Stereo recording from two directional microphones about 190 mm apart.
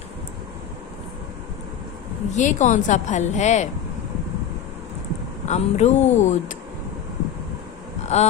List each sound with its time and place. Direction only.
2.3 s a woman's voice: 40° left (ahead or behind)
5.5 s a woman's voice: 35° left (ahead or behind)
8.0 s a sound: 35° left (ahead or behind)